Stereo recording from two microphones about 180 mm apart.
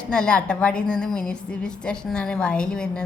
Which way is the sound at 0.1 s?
5° left (ahead or behind).